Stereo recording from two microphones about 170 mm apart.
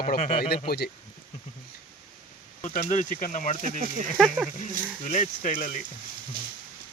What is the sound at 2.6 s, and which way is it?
Speech, 45° left (ahead or behind).